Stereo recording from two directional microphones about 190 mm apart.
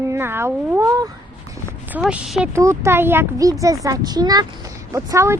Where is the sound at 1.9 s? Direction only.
5° right (ahead or behind).